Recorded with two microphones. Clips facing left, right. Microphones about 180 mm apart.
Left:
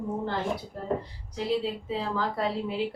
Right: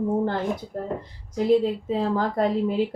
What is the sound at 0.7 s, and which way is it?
Speech, 50° right (ahead or behind).